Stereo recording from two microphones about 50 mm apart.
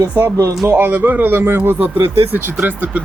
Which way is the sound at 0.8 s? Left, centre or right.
Right.